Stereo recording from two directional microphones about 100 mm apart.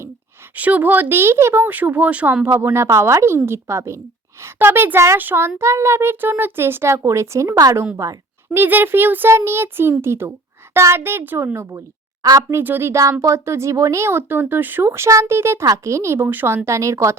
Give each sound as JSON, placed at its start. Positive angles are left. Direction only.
{"t": 0.5, "sound": "speech", "side_deg": -15}
{"t": 8.5, "sound": "speech", "side_deg": -20}
{"t": 12.2, "sound": "a woman's voice", "side_deg": -45}
{"t": 12.5, "sound": "speech", "side_deg": -20}